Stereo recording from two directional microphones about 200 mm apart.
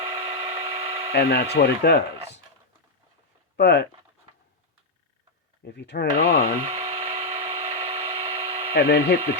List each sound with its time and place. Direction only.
0.0 s tools: 30° right (ahead or behind)
1.1 s speech: 50° left (ahead or behind)
3.6 s speech: 60° left (ahead or behind)
5.6 s speech: 55° left (ahead or behind)
6.7 s tools: 35° right (ahead or behind)
8.7 s speech: 55° left (ahead or behind)